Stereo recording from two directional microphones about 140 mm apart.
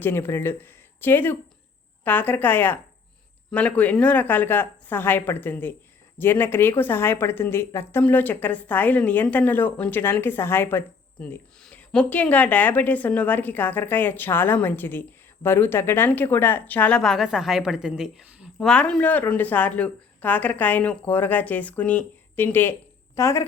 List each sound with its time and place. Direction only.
0.0 s speech: 15° left (ahead or behind); by 18.5 s 5° right (ahead or behind)
18.6 s a woman's voice: 5° left (ahead or behind); by 23.5 s 20° left (ahead or behind)